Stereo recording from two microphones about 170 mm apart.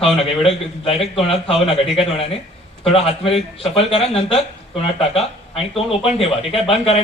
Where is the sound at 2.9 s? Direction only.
35° left (ahead or behind).